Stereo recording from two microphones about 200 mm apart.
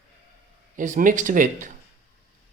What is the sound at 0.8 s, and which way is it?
Speech, 40° right (ahead or behind).